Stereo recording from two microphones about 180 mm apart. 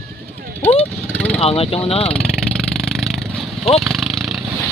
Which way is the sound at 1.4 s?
35° left (ahead or behind).